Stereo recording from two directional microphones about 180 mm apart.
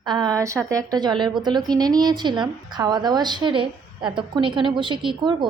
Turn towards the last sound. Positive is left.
turn(degrees=-25)  # may be behind; listen again after turning